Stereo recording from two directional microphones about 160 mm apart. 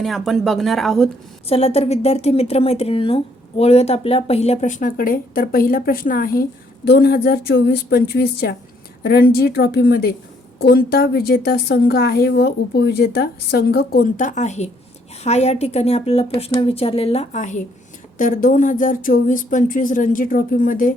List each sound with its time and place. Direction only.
0.0 s a woman's voice: centre (ahead or behind)
1.5 s speech: 40° left (ahead or behind); by 6.4 s 65° left (ahead or behind)
6.8 s a woman's voice: 80° left
9.0 s a woman's voice: 75° left (ahead or behind); by 20.9 s 55° left (ahead or behind)